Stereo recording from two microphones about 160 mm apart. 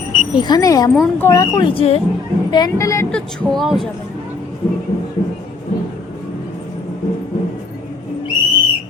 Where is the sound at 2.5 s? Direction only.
25° left (ahead or behind).